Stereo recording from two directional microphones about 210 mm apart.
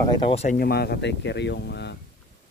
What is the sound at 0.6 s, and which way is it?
Speech, 50° left (ahead or behind).